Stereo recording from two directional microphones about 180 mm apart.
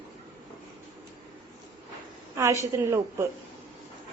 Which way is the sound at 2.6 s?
15° right (ahead or behind).